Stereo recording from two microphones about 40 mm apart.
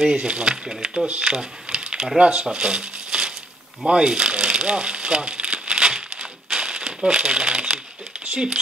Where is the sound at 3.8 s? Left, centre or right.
Right.